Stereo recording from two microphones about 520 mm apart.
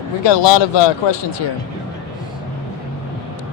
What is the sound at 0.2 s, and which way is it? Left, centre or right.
Speech, left.